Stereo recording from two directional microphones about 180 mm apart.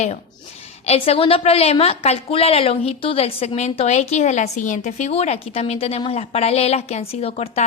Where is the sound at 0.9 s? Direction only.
35° left (ahead or behind).